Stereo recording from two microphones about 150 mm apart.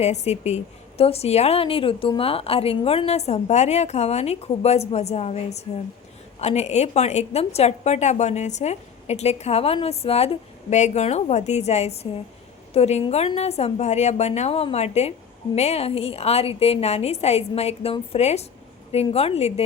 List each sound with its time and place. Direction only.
0.0 s a woman's voice: 45° left (ahead or behind)